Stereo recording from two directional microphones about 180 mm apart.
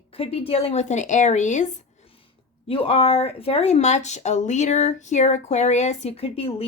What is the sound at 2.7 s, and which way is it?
Speech, 30° left (ahead or behind).